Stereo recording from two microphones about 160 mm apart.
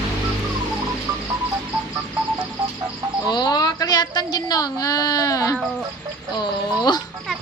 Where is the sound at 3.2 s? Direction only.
25° left (ahead or behind).